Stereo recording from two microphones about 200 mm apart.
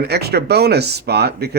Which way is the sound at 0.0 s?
55° right (ahead or behind).